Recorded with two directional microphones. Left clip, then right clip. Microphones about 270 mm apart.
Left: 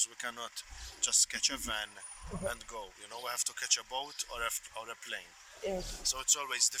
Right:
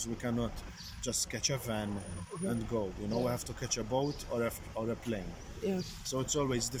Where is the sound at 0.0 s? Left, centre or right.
Left.